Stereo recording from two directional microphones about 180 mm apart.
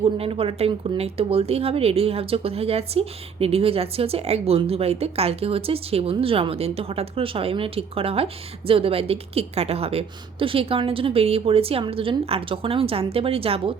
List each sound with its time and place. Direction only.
0.0 s speech: 30° right (ahead or behind)